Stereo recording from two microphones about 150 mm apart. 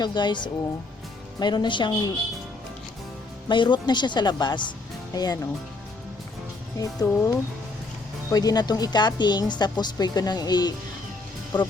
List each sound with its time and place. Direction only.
0.0 s speech: 30° left (ahead or behind)
3.5 s speech: 30° left (ahead or behind)
6.7 s speech: 25° left (ahead or behind)